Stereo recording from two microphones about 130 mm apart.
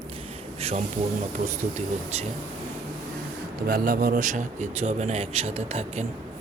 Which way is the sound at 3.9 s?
85° right.